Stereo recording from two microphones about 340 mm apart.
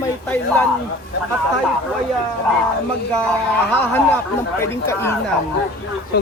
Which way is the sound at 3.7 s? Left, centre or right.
Centre.